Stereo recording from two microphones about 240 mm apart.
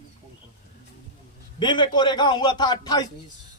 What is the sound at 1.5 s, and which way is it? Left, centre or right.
A man's voice, centre.